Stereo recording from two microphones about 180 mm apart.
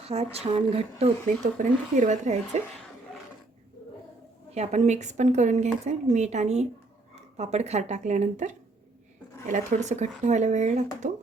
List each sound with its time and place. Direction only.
0.0 s speech: 35° right (ahead or behind)
4.5 s speech: 40° right (ahead or behind)